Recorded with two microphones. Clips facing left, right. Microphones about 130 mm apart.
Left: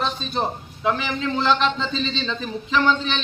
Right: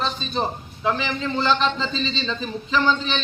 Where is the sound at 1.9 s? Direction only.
60° left (ahead or behind).